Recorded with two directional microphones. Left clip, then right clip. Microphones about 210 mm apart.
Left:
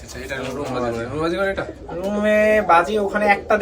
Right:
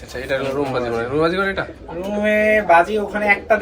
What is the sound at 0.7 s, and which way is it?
Speech, 5° left (ahead or behind).